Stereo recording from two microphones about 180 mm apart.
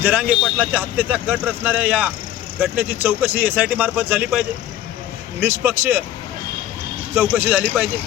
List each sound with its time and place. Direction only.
0.0 s speech: 10° right (ahead or behind)
7.3 s speech: 10° right (ahead or behind)